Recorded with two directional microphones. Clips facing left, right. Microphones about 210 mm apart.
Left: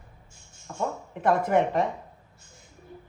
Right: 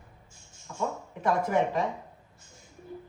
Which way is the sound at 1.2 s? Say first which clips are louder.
Left 3 dB; 60° left (ahead or behind).